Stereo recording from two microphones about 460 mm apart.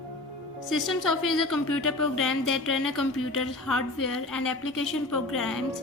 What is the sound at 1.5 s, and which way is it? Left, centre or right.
A woman's voice, left.